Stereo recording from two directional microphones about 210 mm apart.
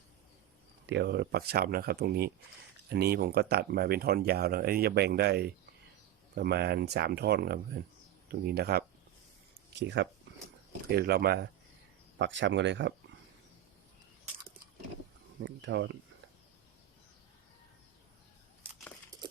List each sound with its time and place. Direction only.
0.9 s speech: 55° right (ahead or behind)
12.2 s speech: 60° right (ahead or behind)
15.4 s speech: 60° right (ahead or behind)